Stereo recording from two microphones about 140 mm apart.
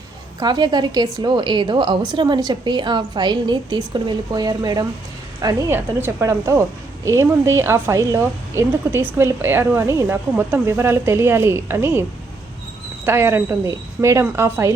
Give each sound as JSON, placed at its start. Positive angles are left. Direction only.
{"t": 0.3, "sound": "a woman's voice", "side_deg": -30}
{"t": 5.7, "sound": "a woman's voice", "side_deg": -15}
{"t": 13.1, "sound": "speech", "side_deg": -15}